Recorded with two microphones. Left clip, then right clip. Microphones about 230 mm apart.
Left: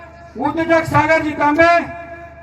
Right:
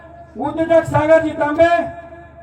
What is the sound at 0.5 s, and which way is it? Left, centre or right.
A man's voice, right.